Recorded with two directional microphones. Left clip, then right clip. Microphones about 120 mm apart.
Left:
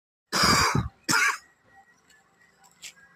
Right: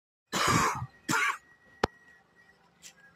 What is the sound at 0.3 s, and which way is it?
Cough, 25° left (ahead or behind).